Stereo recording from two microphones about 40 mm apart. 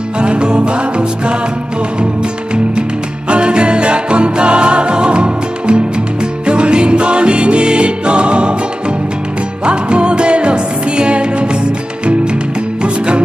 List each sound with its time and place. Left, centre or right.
0.2 s music: right
3.3 s music: right
9.7 s music: right
12.8 s music: right